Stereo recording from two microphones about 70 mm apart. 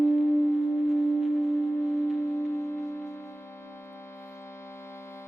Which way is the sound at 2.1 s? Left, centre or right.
Left.